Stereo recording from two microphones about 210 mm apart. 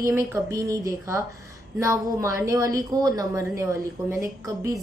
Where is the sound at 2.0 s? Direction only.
15° right (ahead or behind).